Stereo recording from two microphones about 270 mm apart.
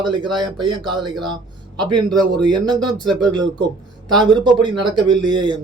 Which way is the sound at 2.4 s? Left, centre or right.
Centre.